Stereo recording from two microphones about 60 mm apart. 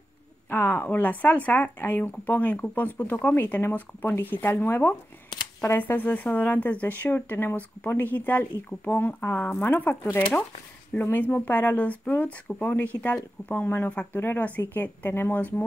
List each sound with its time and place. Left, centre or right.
0.5 s speech: left